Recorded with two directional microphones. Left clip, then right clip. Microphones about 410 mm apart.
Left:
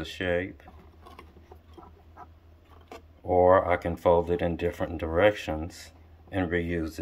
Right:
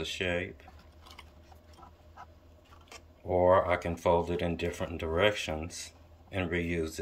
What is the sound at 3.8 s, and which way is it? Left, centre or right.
Speech, left.